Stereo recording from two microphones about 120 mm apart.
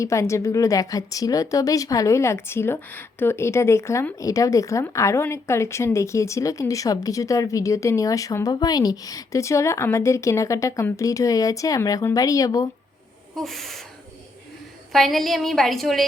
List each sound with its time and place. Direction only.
0.0 s speech: 25° left (ahead or behind)
13.3 s a woman's voice: centre (ahead or behind)
14.9 s a woman's voice: centre (ahead or behind)